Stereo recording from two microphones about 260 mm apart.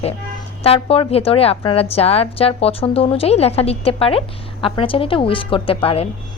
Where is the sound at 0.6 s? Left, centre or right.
Left.